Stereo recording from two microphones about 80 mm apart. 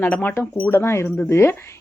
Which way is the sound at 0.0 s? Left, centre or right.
Left.